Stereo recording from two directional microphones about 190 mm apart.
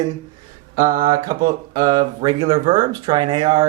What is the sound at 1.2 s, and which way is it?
Speech, 20° right (ahead or behind).